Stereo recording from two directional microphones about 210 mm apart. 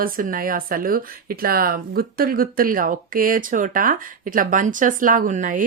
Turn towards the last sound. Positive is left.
turn(degrees=-35)  # may be behind; listen again after turning